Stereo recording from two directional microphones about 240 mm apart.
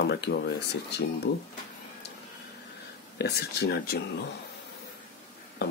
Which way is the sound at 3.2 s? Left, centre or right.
Left.